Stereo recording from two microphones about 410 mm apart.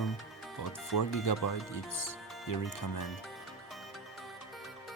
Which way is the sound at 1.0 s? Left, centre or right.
Left.